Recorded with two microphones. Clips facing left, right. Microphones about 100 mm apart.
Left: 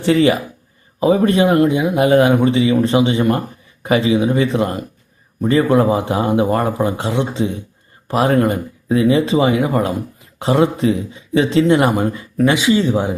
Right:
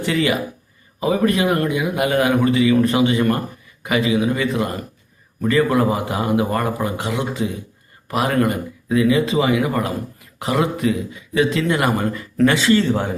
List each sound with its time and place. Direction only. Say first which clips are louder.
0.0 s speech: left 6 dB; 30° left (ahead or behind); by 13.1 s 15° left (ahead or behind)